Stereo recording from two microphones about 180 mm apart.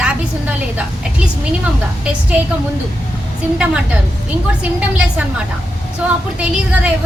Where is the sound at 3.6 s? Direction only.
5° right (ahead or behind).